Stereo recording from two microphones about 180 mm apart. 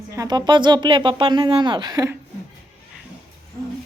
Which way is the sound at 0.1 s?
20° right (ahead or behind).